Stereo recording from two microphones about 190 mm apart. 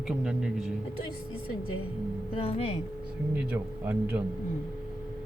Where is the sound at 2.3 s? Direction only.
30° left (ahead or behind).